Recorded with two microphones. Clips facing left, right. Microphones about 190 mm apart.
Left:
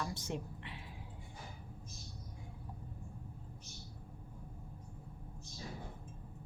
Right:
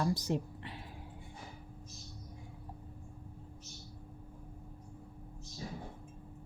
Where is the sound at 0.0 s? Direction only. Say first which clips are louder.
Right 8 dB; 40° right (ahead or behind).